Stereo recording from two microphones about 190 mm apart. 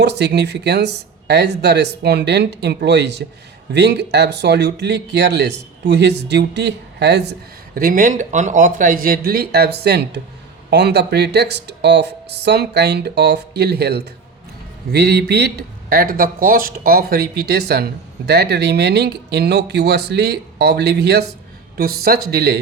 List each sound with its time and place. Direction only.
0.0 s speech: 60° right (ahead or behind)
7.8 s speech: 45° right (ahead or behind)